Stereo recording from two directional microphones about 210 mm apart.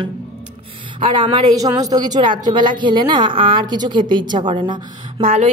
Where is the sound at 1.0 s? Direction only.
25° right (ahead or behind).